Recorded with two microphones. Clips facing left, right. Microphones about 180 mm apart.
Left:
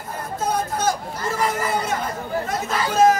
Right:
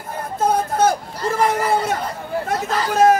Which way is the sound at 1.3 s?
55° right (ahead or behind).